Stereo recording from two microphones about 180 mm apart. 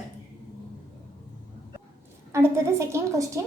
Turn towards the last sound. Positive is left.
turn(degrees=-15)  # may be behind; listen again after turning